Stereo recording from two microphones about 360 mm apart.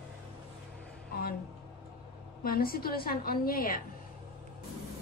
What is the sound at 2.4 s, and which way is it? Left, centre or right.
A woman's voice, left.